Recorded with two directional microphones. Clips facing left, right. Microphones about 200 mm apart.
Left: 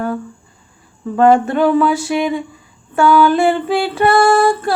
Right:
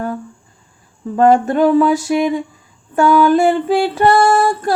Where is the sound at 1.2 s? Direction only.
40° right (ahead or behind).